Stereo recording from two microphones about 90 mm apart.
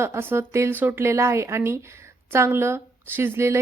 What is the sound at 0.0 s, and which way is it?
A woman's voice, 25° right (ahead or behind).